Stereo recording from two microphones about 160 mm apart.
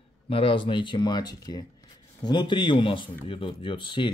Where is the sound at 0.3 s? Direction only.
35° left (ahead or behind).